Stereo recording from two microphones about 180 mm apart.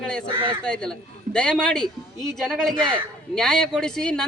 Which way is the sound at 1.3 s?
5° left (ahead or behind).